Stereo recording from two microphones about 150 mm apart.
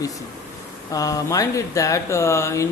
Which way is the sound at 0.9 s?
25° left (ahead or behind).